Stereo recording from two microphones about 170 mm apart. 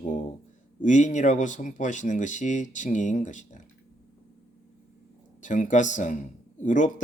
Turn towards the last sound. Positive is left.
turn(degrees=50)  # may be behind; listen again after turning